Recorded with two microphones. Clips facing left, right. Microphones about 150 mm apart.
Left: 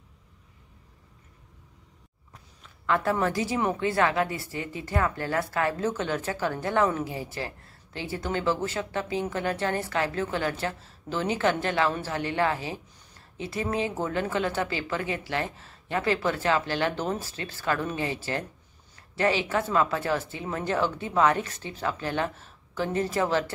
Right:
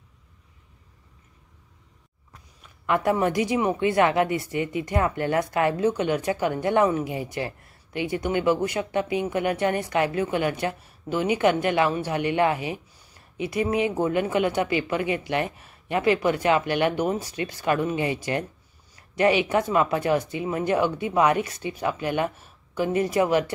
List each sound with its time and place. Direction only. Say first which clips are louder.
2.9 s a woman's voice: right 3 dB; 15° right (ahead or behind)